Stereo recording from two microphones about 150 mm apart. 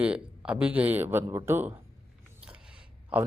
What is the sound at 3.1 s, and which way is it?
Speech, 10° right (ahead or behind).